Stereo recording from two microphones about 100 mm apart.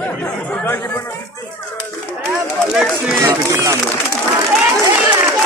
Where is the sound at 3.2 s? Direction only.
30° right (ahead or behind).